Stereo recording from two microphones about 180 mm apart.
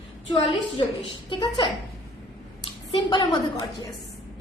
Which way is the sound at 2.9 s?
25° left (ahead or behind).